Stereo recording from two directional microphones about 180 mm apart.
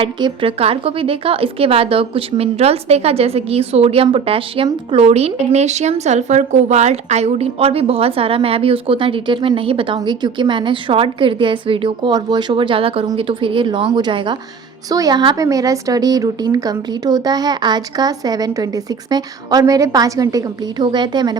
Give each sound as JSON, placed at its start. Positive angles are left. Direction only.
{"t": 0.0, "sound": "speech", "side_deg": -25}